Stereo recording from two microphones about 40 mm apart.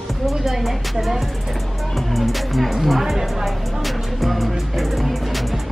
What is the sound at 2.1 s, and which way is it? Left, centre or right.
Music, centre.